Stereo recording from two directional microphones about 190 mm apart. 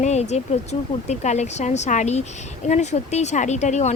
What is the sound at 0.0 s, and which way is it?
Speech, 35° left (ahead or behind).